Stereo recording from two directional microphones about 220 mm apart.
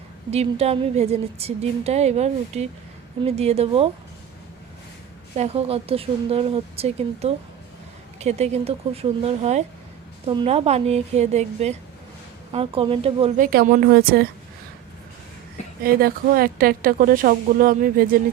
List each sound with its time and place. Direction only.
0.3 s speech: 30° right (ahead or behind)
5.4 s speech: 25° right (ahead or behind); by 14.3 s 45° right (ahead or behind)
15.8 s speech: 45° right (ahead or behind)